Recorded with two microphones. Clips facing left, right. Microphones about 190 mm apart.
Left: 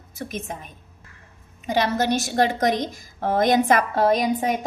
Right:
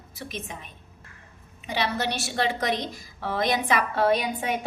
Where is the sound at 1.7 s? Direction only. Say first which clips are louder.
Left 6 dB; 45° left (ahead or behind).